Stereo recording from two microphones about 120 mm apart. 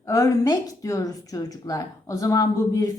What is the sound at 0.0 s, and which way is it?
A woman's voice, 25° left (ahead or behind).